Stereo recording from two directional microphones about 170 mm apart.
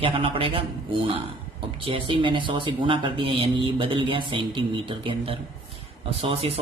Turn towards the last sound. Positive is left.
turn(degrees=-30)  # may be behind; listen again after turning